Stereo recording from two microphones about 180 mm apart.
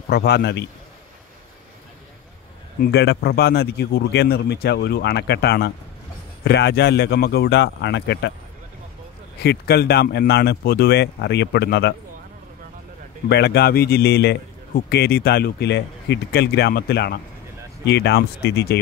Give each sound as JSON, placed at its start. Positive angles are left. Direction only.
{"t": 0.1, "sound": "speech", "side_deg": 65}
{"t": 2.8, "sound": "speech", "side_deg": 65}
{"t": 9.4, "sound": "speech", "side_deg": 60}
{"t": 13.3, "sound": "speech", "side_deg": 65}